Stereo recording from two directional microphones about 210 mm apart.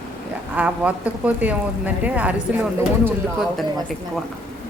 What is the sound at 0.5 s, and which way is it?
A woman's voice, 5° right (ahead or behind).